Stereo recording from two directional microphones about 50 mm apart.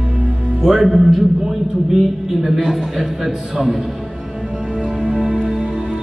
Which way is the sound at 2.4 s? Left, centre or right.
Centre.